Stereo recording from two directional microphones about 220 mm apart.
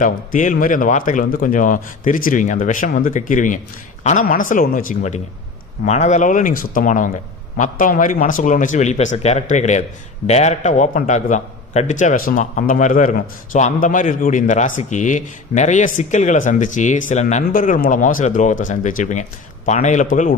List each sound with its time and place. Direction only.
0.0 s a man's voice: 35° left (ahead or behind)